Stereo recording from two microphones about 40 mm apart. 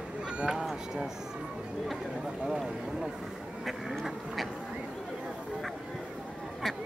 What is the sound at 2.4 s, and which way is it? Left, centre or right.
Speech, centre.